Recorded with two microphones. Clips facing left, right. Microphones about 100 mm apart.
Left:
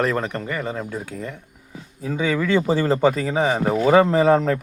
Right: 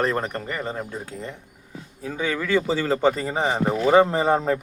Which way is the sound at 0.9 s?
25° right (ahead or behind).